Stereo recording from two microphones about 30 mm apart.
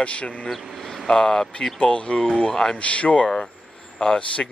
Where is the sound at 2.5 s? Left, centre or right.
Left.